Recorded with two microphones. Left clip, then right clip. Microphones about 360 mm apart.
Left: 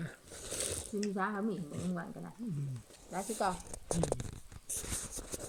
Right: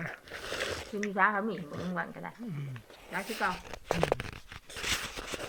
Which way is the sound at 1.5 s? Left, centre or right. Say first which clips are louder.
Right 4 dB; right.